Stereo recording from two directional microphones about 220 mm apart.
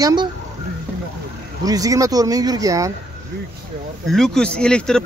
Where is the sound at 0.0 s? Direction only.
20° right (ahead or behind).